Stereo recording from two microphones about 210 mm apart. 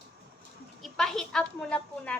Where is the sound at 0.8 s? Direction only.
Centre (ahead or behind).